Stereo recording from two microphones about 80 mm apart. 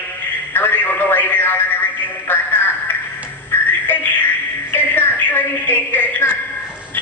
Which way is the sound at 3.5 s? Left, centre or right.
Left.